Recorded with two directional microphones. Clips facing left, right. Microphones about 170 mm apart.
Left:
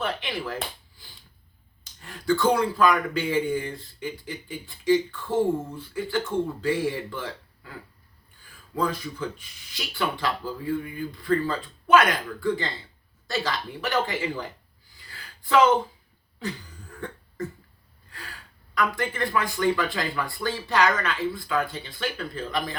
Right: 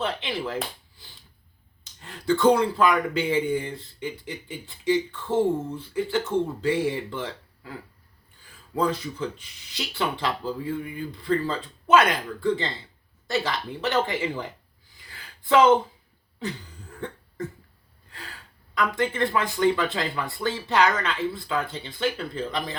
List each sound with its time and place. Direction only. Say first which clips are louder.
0.0 s speech: right 1 dB; 20° right (ahead or behind)
1.8 s speech: right 1 dB; 20° right (ahead or behind)
8.7 s speech: right 2 dB; 25° right (ahead or behind)
15.1 s a sound: right 1 dB; 20° right (ahead or behind)
18.7 s speech: right 2 dB; 20° right (ahead or behind)